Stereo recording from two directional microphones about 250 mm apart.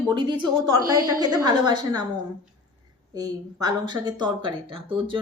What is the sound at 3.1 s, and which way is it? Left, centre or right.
Speech, centre.